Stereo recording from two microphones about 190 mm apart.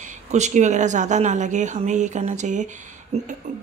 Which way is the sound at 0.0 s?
40° right (ahead or behind).